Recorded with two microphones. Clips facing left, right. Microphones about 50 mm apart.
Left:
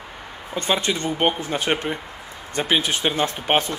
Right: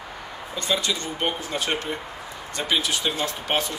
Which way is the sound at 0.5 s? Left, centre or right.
Left.